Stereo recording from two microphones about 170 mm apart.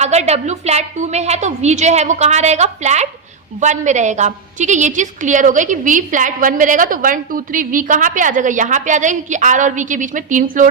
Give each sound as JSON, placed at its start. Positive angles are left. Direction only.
{"t": 0.0, "sound": "a woman's voice", "side_deg": -40}